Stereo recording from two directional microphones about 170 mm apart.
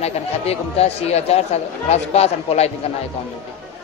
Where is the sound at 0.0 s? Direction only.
35° left (ahead or behind).